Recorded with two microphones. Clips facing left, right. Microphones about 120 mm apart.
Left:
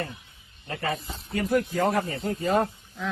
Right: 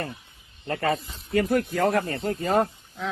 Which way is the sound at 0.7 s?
60° right (ahead or behind).